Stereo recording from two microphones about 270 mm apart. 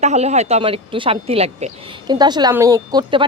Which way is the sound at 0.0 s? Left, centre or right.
Right.